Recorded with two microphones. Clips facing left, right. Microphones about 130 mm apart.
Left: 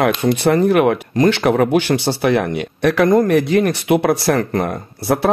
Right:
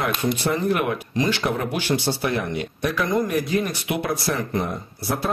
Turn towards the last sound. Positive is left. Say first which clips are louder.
# left 8 dB
turn(degrees=70)  # may be behind; listen again after turning